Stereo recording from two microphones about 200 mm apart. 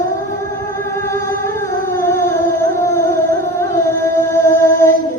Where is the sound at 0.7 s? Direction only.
15° left (ahead or behind).